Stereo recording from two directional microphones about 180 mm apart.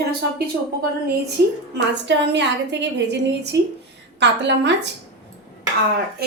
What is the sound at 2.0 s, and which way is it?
A woman's voice, 75° right (ahead or behind).